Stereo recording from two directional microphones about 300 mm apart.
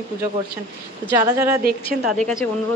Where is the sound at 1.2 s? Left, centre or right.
Centre.